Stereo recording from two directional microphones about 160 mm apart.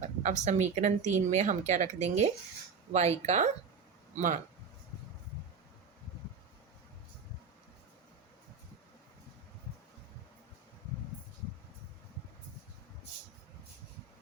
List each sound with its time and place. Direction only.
0.0 s speech: 50° right (ahead or behind)